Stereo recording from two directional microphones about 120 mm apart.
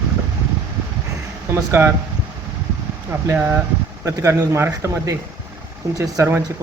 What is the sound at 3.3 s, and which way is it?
Speech, 20° right (ahead or behind).